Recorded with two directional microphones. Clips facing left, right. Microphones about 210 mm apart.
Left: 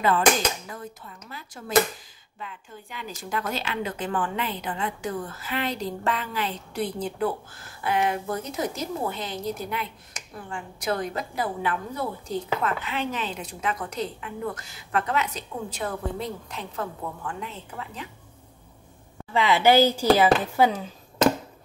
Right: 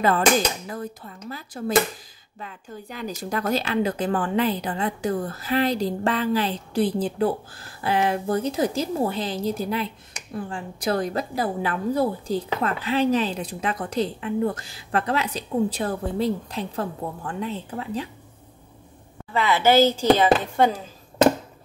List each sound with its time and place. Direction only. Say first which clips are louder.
0.7 s speech: right 6 dB; 40° right (ahead or behind)
19.3 s speech: right 1 dB; 15° left (ahead or behind)